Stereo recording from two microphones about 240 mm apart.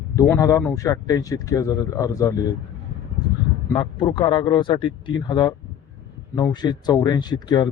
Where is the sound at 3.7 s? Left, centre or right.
Centre.